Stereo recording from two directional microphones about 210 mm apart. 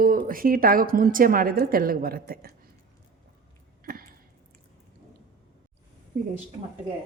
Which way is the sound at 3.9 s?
45° right (ahead or behind).